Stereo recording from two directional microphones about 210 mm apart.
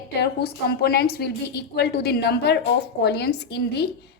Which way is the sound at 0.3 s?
50° left (ahead or behind).